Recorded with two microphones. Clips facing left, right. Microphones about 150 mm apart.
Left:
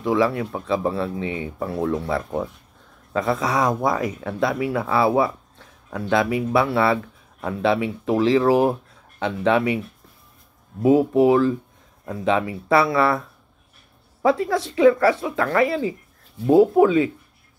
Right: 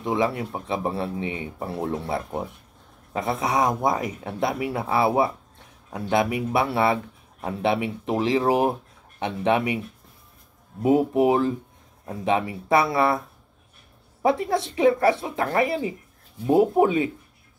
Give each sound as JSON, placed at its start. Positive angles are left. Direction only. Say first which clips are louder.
{"t": 0.0, "sound": "speech", "louder": "left 4 dB", "side_deg": -20}
{"t": 10.8, "sound": "speech", "louder": "left 3 dB", "side_deg": -25}
{"t": 14.2, "sound": "speech", "louder": "left 2 dB", "side_deg": -25}